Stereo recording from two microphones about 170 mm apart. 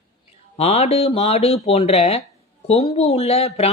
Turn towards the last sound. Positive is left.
turn(degrees=40)  # may be behind; listen again after turning